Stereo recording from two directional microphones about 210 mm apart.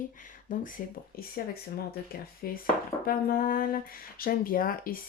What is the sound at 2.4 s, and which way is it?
Speech, 45° left (ahead or behind).